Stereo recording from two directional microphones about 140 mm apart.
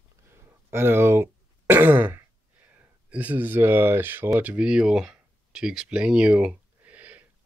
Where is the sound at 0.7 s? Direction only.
15° right (ahead or behind).